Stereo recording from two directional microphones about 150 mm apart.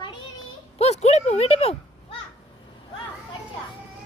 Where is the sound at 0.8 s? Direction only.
45° left (ahead or behind).